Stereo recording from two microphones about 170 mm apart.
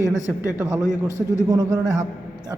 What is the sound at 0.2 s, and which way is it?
Speech, 20° left (ahead or behind).